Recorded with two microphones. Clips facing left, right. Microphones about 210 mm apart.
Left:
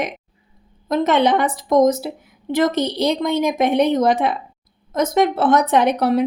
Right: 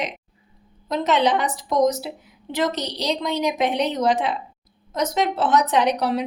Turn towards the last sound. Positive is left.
turn(degrees=55)  # may be behind; listen again after turning